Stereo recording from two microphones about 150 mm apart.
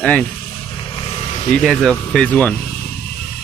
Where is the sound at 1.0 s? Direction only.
35° left (ahead or behind).